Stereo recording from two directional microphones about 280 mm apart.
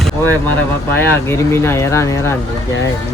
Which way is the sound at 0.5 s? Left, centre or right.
Centre.